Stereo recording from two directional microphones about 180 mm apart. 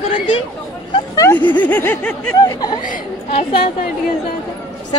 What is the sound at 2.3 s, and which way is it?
Speech, 20° left (ahead or behind).